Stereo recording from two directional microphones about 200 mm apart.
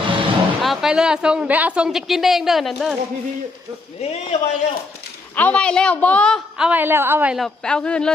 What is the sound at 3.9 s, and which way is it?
Speech, 30° left (ahead or behind).